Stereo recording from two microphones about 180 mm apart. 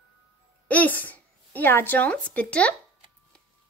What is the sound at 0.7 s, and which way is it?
Speech, 10° left (ahead or behind).